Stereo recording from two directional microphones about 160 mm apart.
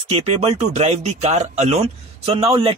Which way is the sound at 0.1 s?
40° right (ahead or behind).